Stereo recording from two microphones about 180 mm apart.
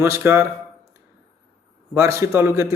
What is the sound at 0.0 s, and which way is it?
Speech, 15° right (ahead or behind).